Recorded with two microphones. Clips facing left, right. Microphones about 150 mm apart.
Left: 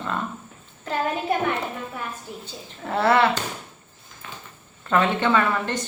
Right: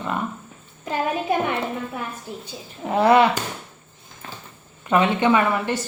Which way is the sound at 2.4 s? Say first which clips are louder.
Right 3 dB; 15° right (ahead or behind).